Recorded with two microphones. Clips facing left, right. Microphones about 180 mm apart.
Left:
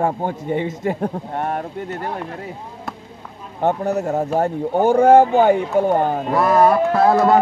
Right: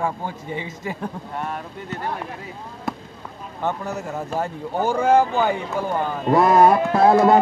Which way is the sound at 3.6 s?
45° left (ahead or behind).